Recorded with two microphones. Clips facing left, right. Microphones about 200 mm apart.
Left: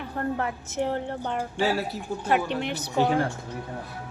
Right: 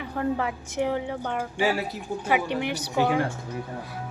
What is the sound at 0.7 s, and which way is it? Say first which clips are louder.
Speech: right 2 dB; 15° right (ahead or behind).